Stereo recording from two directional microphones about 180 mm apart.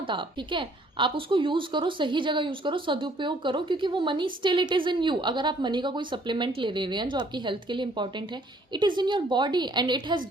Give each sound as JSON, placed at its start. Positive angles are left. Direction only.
{"t": 0.1, "sound": "a woman's voice", "side_deg": -25}